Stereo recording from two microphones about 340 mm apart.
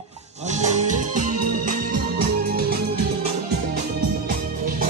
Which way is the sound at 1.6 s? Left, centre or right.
Right.